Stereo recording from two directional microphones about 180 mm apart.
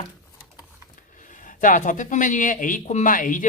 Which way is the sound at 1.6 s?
45° left (ahead or behind).